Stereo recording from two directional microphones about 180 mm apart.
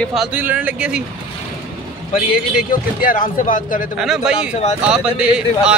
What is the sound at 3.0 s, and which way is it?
Speech, 50° left (ahead or behind).